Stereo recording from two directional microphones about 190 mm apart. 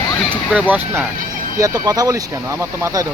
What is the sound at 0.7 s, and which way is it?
Speech, 10° right (ahead or behind).